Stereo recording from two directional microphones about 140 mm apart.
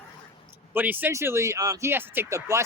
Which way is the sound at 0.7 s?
10° right (ahead or behind).